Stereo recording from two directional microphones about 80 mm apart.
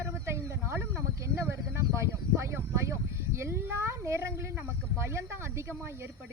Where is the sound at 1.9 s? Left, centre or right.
Right.